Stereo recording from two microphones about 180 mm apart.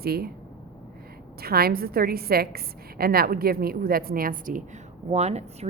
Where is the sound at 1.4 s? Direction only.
60° right (ahead or behind).